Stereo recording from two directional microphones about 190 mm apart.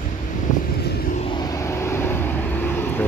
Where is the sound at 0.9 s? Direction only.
45° left (ahead or behind).